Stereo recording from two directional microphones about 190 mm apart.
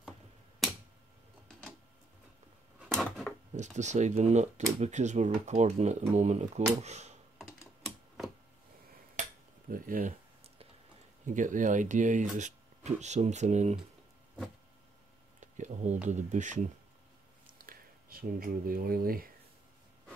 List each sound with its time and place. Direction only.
1.5 s printer: 5° left (ahead or behind)
2.9 s a sound: centre (ahead or behind)
3.5 s speech: 40° right (ahead or behind)
9.2 s dishes: 40° right (ahead or behind)
9.7 s speech: 45° right (ahead or behind)
11.2 s speech: 40° right (ahead or behind)
15.4 s a sound: 40° right (ahead or behind)
16.1 s speech: 40° right (ahead or behind)
17.5 s a sound: 45° right (ahead or behind)